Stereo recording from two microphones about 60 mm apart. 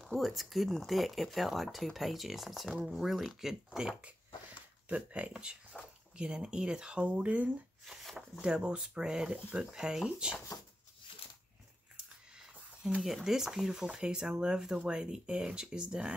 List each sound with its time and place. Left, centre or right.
0.0 s speech: centre
4.8 s speech: right
7.8 s speech: centre
8.4 s speech: centre
12.4 s speech: centre